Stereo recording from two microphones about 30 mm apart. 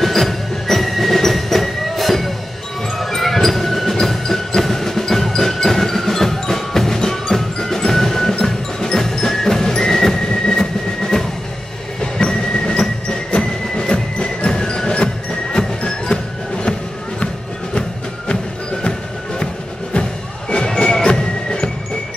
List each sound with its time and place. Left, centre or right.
0.0 s music: centre
12.3 s train: left
14.5 s music: centre
18.3 s music: left